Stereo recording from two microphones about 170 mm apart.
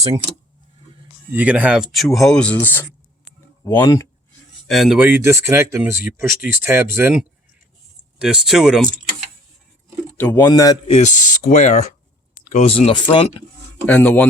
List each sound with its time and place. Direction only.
1.3 s speech: 10° right (ahead or behind); by 4.1 s 20° left (ahead or behind)
4.7 s speech: centre (ahead or behind)
10.2 s speech: 15° left (ahead or behind)
10.8 s speech: 45° left (ahead or behind)
13.8 s speech: 10° left (ahead or behind)